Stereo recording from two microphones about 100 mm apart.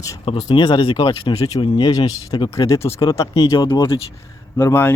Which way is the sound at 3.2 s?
50° left (ahead or behind).